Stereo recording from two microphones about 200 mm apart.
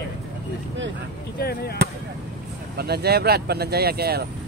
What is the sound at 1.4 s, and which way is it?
Speech, 50° left (ahead or behind).